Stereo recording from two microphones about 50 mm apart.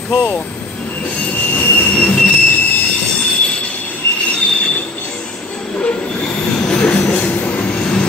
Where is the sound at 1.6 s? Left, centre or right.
Left.